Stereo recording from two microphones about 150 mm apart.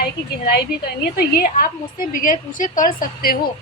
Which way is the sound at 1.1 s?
75° left (ahead or behind).